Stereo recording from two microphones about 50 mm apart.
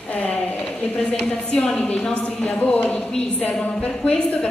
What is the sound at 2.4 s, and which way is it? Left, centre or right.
A woman's voice, left.